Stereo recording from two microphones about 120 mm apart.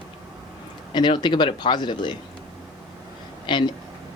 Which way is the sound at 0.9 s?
40° left (ahead or behind).